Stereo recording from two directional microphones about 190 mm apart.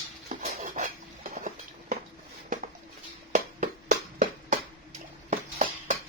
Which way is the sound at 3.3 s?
40° right (ahead or behind).